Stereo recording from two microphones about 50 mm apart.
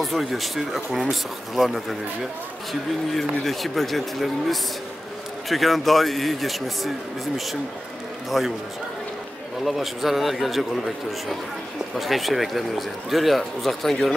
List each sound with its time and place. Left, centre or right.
0.0 s speech: centre
3.4 s speech: centre
8.3 s speech: centre
9.7 s speech: centre
12.0 s speech: centre